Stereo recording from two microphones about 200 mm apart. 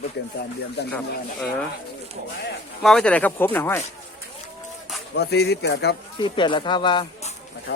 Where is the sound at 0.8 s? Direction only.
55° left (ahead or behind).